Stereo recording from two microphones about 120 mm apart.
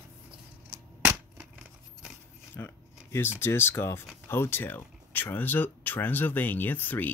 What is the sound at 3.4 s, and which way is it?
Speech, 20° left (ahead or behind).